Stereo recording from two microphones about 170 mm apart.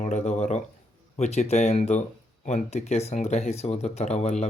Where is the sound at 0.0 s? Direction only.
45° left (ahead or behind).